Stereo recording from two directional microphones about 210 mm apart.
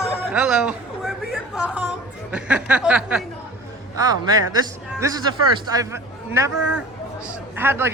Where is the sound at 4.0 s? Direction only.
20° right (ahead or behind).